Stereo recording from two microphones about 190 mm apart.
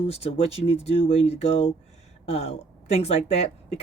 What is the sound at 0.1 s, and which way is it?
A woman's voice, 35° left (ahead or behind).